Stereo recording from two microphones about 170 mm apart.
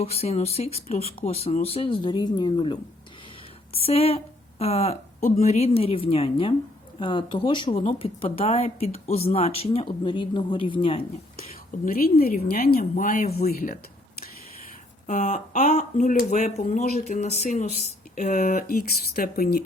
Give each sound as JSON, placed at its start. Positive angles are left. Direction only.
{"t": 0.0, "sound": "a woman's voice", "side_deg": 35}
{"t": 11.9, "sound": "speech", "side_deg": 60}
{"t": 15.0, "sound": "speech", "side_deg": 50}
{"t": 18.1, "sound": "speech", "side_deg": 55}